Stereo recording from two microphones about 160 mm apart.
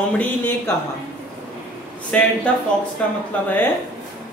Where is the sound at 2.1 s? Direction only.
10° left (ahead or behind).